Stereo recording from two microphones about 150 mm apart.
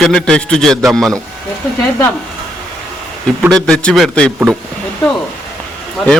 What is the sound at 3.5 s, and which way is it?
Speech, 5° left (ahead or behind).